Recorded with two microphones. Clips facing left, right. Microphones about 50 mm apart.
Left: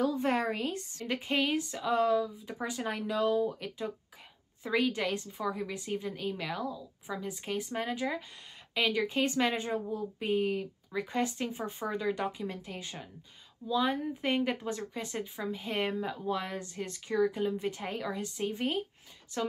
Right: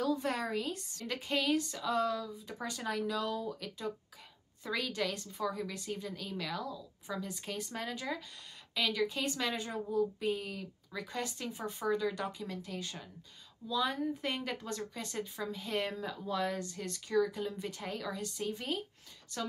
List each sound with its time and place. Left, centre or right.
0.0 s a woman's voice: left
1.0 s a woman's voice: centre